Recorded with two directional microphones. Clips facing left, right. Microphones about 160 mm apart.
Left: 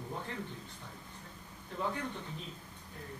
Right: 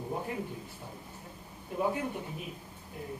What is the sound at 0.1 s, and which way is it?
Speech, 15° right (ahead or behind).